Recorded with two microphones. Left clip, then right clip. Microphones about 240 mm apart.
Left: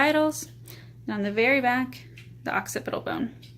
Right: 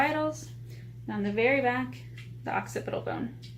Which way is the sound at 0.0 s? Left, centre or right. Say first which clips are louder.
Left 5 dB; left.